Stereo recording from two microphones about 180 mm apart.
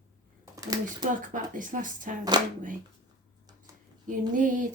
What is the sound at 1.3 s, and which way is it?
Speech, 45° right (ahead or behind).